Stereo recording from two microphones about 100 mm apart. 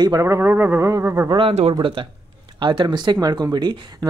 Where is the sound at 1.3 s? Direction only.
80° right.